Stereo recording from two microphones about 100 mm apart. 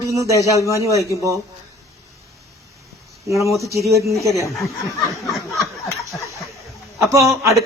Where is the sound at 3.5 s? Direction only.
30° left (ahead or behind).